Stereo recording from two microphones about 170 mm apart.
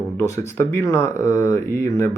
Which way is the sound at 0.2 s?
15° left (ahead or behind).